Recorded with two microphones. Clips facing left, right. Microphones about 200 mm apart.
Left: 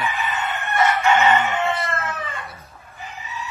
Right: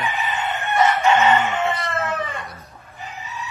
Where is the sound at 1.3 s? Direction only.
10° right (ahead or behind).